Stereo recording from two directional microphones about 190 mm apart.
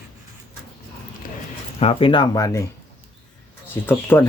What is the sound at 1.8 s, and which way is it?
Speech, 30° left (ahead or behind).